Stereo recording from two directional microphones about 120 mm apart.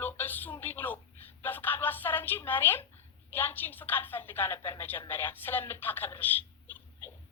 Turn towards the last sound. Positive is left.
turn(degrees=15)  # may be behind; listen again after turning